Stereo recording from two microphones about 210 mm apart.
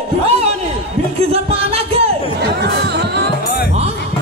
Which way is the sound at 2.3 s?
55° right (ahead or behind).